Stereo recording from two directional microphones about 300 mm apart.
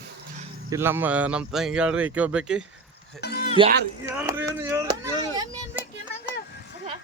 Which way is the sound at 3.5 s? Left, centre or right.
Centre.